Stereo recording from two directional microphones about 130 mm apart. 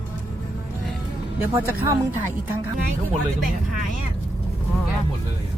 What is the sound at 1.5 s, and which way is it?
Speech, 20° right (ahead or behind).